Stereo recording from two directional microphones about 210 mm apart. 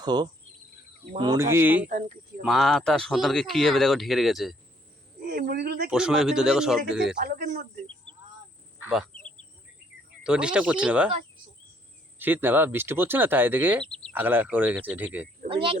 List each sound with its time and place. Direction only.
0.0 s speech: 20° right (ahead or behind)
1.9 s speech: 40° right (ahead or behind)
2.4 s speech: centre (ahead or behind)
5.2 s speech: 45° right (ahead or behind)
5.9 s speech: 5° right (ahead or behind)
7.2 s speech: 40° right (ahead or behind)
8.8 s a sound: 5° right (ahead or behind)
10.2 s speech: 5° right (ahead or behind)
12.2 s speech: 10° right (ahead or behind)
13.8 s a sound: 5° left (ahead or behind)
14.1 s speech: 10° right (ahead or behind)
15.4 s speech: 25° right (ahead or behind)